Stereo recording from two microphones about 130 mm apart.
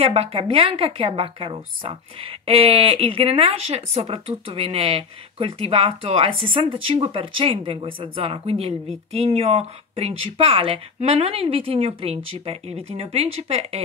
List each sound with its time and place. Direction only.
0.0 s a woman's voice: 50° right (ahead or behind)